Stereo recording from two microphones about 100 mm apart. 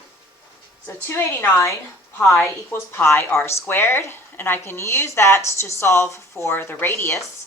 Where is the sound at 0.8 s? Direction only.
20° left (ahead or behind).